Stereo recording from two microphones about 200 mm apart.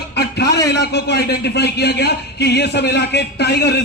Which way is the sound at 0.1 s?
55° left (ahead or behind).